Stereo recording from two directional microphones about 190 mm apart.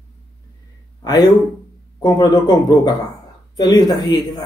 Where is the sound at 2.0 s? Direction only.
20° left (ahead or behind).